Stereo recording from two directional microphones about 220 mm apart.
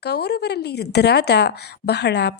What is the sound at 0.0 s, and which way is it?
Speech, 50° left (ahead or behind).